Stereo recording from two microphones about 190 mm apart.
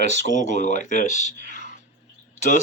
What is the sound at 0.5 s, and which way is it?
Speech, 40° left (ahead or behind).